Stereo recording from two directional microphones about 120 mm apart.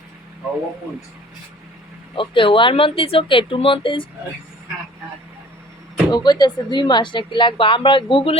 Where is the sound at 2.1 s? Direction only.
45° left (ahead or behind).